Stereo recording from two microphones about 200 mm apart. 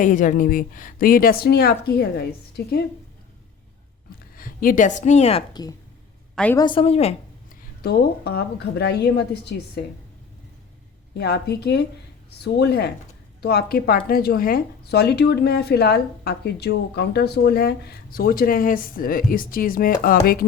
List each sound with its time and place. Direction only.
0.0 s speech: 40° left (ahead or behind)
4.4 s a woman's voice: 45° left (ahead or behind)
5.6 s a woman's voice: 20° left (ahead or behind)
6.3 s a woman's voice: 5° left (ahead or behind)
6.6 s a woman's voice: 25° left (ahead or behind)
7.8 s a woman's voice: 50° left (ahead or behind)
11.2 s a woman's voice: 55° left (ahead or behind)